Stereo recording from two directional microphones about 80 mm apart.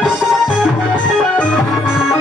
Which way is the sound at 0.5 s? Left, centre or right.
Centre.